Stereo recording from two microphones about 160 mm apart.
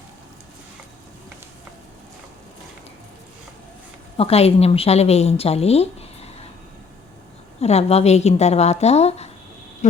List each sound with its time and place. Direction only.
4.2 s a woman's voice: 40° left (ahead or behind)
7.6 s a woman's voice: 40° left (ahead or behind)